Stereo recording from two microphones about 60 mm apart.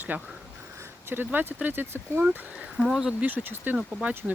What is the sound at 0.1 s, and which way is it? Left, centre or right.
Speech, right.